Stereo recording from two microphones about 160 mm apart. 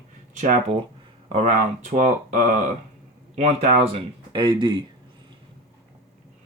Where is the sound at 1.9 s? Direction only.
50° right (ahead or behind).